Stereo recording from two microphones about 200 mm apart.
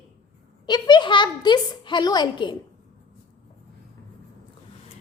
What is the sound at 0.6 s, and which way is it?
A woman's voice, 20° left (ahead or behind).